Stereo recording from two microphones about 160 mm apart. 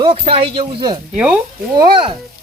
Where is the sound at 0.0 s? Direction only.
35° right (ahead or behind).